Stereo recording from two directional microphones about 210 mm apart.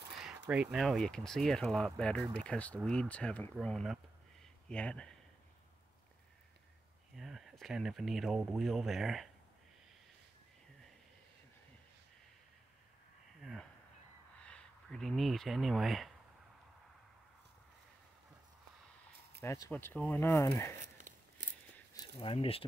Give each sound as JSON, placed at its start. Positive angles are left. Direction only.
{"t": 0.5, "sound": "speech", "side_deg": -5}
{"t": 7.2, "sound": "speech", "side_deg": 0}
{"t": 13.4, "sound": "speech", "side_deg": 0}
{"t": 19.4, "sound": "speech", "side_deg": 15}
{"t": 22.2, "sound": "speech", "side_deg": 25}